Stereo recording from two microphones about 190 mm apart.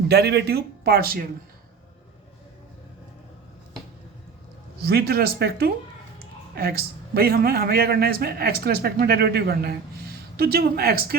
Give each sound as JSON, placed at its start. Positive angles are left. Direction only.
{"t": 0.1, "sound": "a man's voice", "side_deg": -60}
{"t": 4.9, "sound": "a man's voice", "side_deg": -55}